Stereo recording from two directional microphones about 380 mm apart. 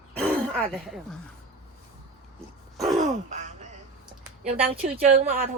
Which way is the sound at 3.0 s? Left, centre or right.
Centre.